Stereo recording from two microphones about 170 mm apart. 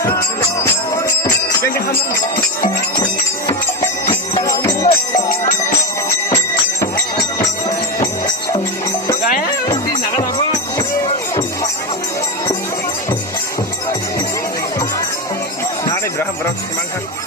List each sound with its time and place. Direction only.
1.7 s speech: 60° left (ahead or behind)
4.1 s music: 20° left (ahead or behind)
9.6 s music: 25° left (ahead or behind)